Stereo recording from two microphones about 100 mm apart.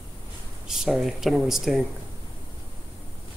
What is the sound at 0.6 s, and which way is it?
Speech, 5° right (ahead or behind).